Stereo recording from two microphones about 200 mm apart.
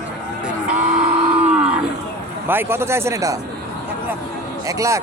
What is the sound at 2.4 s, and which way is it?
Speech, 10° right (ahead or behind).